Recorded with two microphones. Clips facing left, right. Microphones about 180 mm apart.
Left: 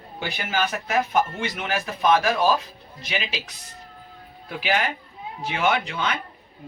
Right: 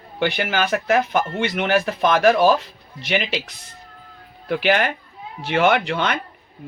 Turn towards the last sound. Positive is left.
turn(degrees=-65)  # may be behind; listen again after turning